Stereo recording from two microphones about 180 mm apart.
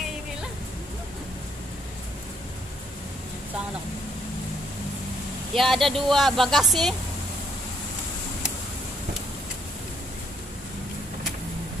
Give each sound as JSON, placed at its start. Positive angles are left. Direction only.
{"t": 5.5, "sound": "speech", "side_deg": 0}